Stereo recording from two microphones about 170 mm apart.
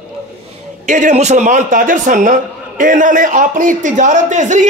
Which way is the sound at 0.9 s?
45° right (ahead or behind).